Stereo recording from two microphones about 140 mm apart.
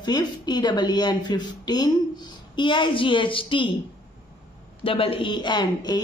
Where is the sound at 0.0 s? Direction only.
30° left (ahead or behind).